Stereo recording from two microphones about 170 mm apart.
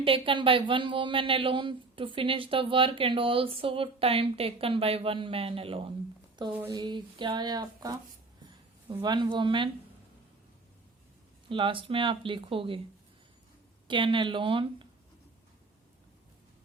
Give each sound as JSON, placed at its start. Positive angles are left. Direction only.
{"t": 0.0, "sound": "speech", "side_deg": -30}
{"t": 6.5, "sound": "speech", "side_deg": -15}
{"t": 11.4, "sound": "speech", "side_deg": -30}
{"t": 13.8, "sound": "speech", "side_deg": -30}